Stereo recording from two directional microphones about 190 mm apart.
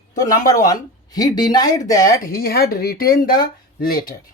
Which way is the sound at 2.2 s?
50° left (ahead or behind).